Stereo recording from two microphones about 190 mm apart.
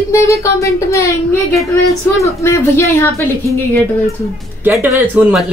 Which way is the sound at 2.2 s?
15° left (ahead or behind).